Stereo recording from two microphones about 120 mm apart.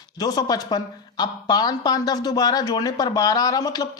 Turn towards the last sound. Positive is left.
turn(degrees=30)  # may be behind; listen again after turning